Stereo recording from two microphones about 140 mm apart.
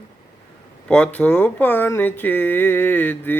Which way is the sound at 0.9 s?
10° left (ahead or behind).